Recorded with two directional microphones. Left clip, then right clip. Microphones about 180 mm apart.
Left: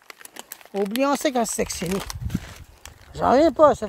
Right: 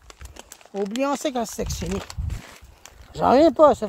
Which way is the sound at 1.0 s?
5° left (ahead or behind).